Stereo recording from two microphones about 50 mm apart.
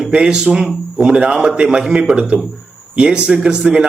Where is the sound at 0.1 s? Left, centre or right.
Centre.